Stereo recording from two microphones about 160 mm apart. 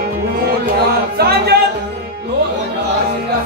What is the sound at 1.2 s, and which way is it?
Music, 85° right.